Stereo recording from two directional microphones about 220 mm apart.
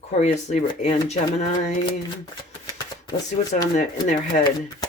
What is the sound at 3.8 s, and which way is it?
Speech, 35° left (ahead or behind).